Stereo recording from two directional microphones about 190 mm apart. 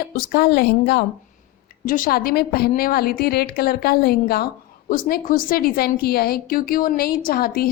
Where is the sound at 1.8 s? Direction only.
45° left (ahead or behind).